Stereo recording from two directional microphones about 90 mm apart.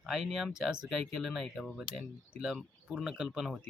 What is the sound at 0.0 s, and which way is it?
Speech, 5° right (ahead or behind).